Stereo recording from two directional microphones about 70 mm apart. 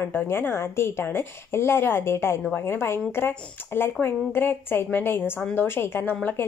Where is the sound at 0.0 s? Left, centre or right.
Left.